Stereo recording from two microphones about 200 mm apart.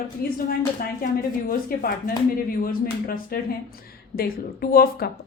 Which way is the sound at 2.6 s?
45° left (ahead or behind).